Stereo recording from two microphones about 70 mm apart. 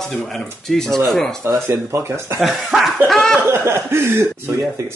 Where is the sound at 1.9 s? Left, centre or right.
Right.